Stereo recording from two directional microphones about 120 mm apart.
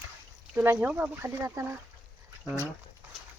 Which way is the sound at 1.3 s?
25° right (ahead or behind).